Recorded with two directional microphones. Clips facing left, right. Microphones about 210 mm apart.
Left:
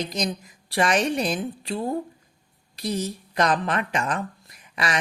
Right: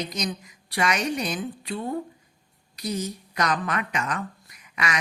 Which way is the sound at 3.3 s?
30° left (ahead or behind).